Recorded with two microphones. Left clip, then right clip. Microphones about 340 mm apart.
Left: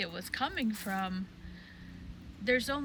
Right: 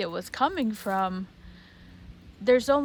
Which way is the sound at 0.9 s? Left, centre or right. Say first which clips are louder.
Right 12 dB; left.